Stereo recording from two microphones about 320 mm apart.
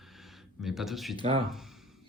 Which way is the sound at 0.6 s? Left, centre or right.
Centre.